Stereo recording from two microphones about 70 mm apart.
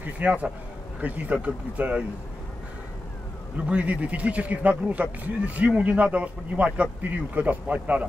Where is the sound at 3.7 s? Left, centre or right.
Centre.